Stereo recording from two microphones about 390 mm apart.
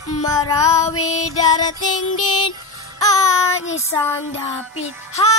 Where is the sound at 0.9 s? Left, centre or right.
Left.